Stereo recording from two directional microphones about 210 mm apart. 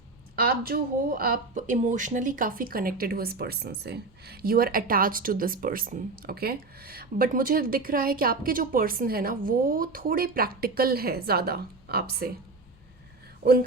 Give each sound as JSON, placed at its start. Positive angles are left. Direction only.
{"t": 0.3, "sound": "speech", "side_deg": -45}
{"t": 13.4, "sound": "speech", "side_deg": -45}